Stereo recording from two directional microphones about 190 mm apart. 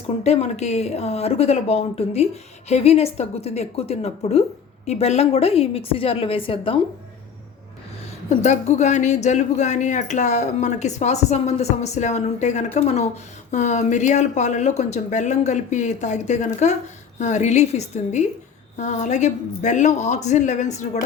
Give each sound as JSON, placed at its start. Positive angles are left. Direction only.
{"t": 0.2, "sound": "speech", "side_deg": 35}
{"t": 8.4, "sound": "speech", "side_deg": 35}